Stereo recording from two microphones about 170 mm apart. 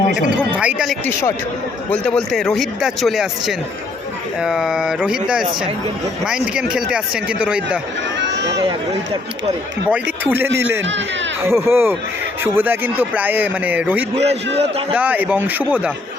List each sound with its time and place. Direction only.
0.6 s speech: 5° right (ahead or behind)
1.9 s speech: 5° left (ahead or behind)
8.2 s run: 90° right
9.9 s speech: 10° right (ahead or behind)
14.2 s a man's voice: 35° right (ahead or behind)
14.9 s speech: 10° right (ahead or behind)